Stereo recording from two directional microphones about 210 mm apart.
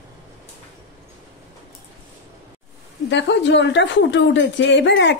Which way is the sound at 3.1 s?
55° left (ahead or behind).